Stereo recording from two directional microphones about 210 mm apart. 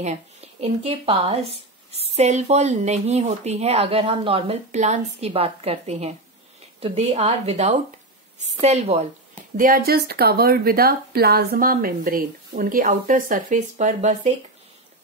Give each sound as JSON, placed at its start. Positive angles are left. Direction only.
{"t": 0.0, "sound": "a woman's voice", "side_deg": -30}
{"t": 9.6, "sound": "a woman's voice", "side_deg": -45}